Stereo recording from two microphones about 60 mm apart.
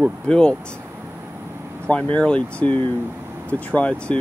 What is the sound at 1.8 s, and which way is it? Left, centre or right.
Speech, centre.